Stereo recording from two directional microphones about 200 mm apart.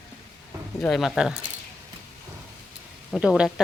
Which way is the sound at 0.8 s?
Centre (ahead or behind).